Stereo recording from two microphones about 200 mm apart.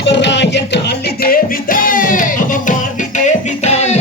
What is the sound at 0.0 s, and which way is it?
Music, 60° left (ahead or behind).